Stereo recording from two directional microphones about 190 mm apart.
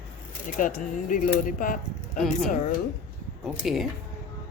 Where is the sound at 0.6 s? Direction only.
45° left (ahead or behind).